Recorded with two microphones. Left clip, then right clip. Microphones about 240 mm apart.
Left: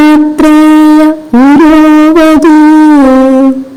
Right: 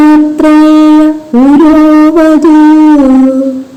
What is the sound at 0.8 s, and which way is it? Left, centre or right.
Wind instrument, left.